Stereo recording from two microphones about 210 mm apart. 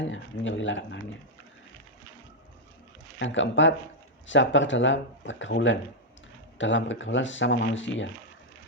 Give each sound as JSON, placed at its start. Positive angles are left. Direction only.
{"t": 0.0, "sound": "speech", "side_deg": 65}
{"t": 3.2, "sound": "speech", "side_deg": 60}